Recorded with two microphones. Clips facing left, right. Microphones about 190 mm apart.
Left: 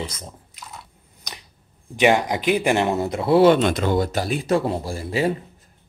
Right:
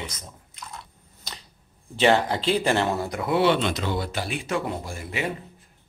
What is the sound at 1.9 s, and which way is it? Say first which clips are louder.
Speech: left 2 dB; 15° left (ahead or behind).